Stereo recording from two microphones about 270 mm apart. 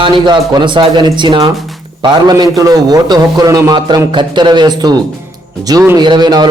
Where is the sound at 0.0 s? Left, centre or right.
Centre.